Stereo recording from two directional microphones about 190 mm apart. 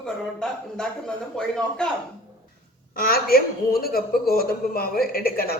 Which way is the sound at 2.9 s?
50° left (ahead or behind).